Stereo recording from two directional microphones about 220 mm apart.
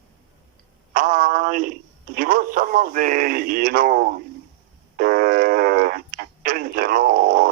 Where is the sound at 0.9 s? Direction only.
40° right (ahead or behind).